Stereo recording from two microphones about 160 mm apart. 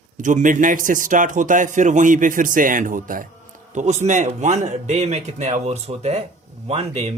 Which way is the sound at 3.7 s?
45° right (ahead or behind).